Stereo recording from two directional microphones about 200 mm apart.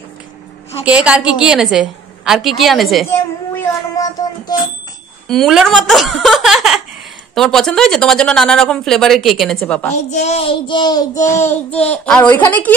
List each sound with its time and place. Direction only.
0.8 s speech: 5° right (ahead or behind)
3.5 s child singing: 15° left (ahead or behind)
5.3 s speech: centre (ahead or behind)
10.0 s child singing: 35° left (ahead or behind); by 11.3 s 15° left (ahead or behind)
11.4 s a child's voice: 5° left (ahead or behind)